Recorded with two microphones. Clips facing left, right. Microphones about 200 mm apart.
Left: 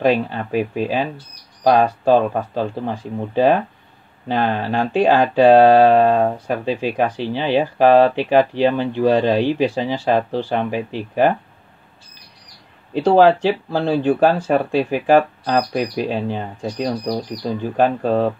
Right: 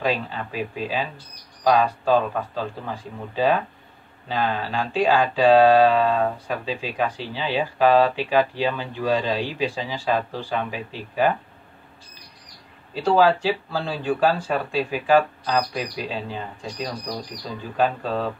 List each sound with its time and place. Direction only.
0.0 s speech: 50° left (ahead or behind)
12.9 s speech: 50° left (ahead or behind)